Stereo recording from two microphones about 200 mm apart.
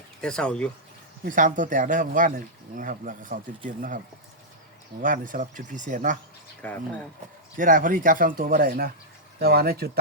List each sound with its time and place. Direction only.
0.2 s speech: 5° left (ahead or behind)
1.2 s speech: 40° right (ahead or behind)
5.0 s speech: 40° right (ahead or behind)
6.6 s speech: 10° left (ahead or behind)
7.5 s speech: 40° right (ahead or behind)